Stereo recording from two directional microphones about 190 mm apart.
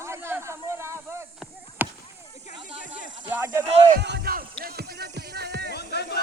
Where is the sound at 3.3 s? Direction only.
10° right (ahead or behind).